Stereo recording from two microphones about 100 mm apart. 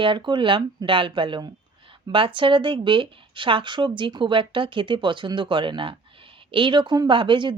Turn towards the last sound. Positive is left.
turn(degrees=-55)  # may be behind; listen again after turning